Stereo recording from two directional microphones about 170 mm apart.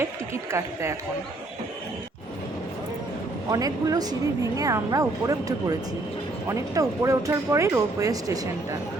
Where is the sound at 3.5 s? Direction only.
20° right (ahead or behind).